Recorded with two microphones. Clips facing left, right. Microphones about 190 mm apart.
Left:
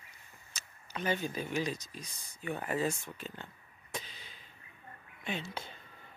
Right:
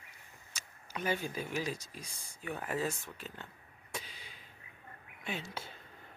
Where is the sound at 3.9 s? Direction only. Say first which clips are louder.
Left 2 dB; 10° right (ahead or behind).